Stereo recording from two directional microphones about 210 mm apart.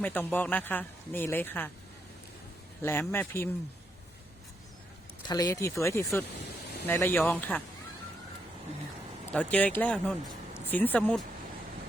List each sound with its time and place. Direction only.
0.0 s speech: 10° left (ahead or behind)
2.8 s speech: 10° left (ahead or behind)
5.3 s speech: 15° left (ahead or behind)
9.3 s speech: 5° left (ahead or behind)